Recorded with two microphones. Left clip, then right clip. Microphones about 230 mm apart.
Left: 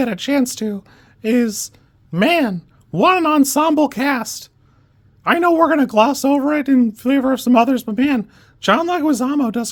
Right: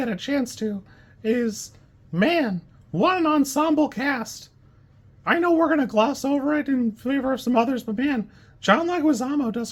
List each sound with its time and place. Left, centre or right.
0.0 s speech: left